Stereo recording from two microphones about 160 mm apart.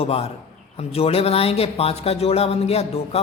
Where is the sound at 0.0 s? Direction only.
40° left (ahead or behind).